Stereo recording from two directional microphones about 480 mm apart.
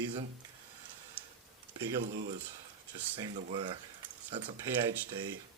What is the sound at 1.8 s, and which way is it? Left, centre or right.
Speech, centre.